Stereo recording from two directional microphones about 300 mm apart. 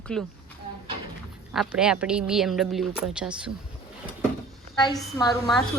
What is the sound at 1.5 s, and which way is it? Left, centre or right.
Speech, centre.